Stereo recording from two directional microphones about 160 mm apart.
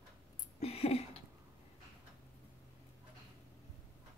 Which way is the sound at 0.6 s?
40° left (ahead or behind).